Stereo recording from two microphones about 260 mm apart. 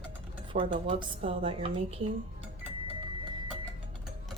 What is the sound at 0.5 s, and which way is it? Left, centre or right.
A woman's voice, right.